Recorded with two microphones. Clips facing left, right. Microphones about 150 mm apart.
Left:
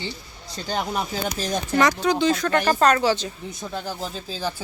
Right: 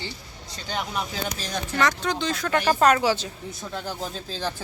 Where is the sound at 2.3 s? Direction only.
5° right (ahead or behind).